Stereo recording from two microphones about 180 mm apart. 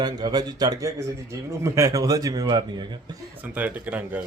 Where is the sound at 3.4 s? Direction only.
10° right (ahead or behind).